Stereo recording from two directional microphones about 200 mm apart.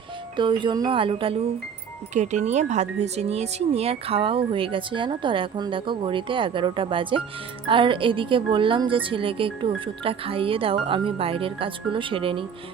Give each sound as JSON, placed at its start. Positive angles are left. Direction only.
{"t": 0.3, "sound": "speech", "side_deg": -25}